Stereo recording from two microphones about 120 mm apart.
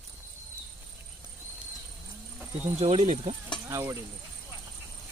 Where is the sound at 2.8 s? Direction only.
65° right (ahead or behind).